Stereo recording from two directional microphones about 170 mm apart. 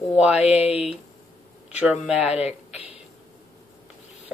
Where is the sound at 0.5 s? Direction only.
35° left (ahead or behind).